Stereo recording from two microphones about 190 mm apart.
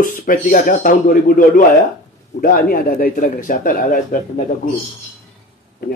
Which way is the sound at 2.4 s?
50° left (ahead or behind).